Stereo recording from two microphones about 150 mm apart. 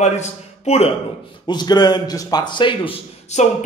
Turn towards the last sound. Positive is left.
turn(degrees=50)  # may be behind; listen again after turning